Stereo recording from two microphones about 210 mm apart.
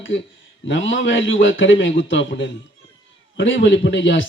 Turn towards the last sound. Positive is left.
turn(degrees=60)  # may be behind; listen again after turning